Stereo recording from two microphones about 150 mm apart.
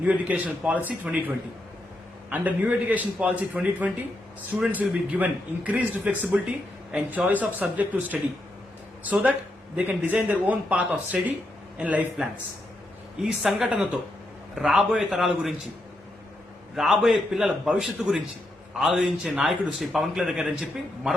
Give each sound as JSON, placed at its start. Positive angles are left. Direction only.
{"t": 0.0, "sound": "a man's voice", "side_deg": -10}
{"t": 2.3, "sound": "a man's voice", "side_deg": -10}
{"t": 9.7, "sound": "a man's voice", "side_deg": -10}
{"t": 13.2, "sound": "a man's voice", "side_deg": -5}
{"t": 16.7, "sound": "a man's voice", "side_deg": 0}